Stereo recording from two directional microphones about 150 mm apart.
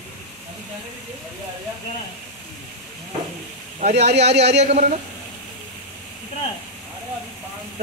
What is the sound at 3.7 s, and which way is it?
A man's voice, 50° right (ahead or behind).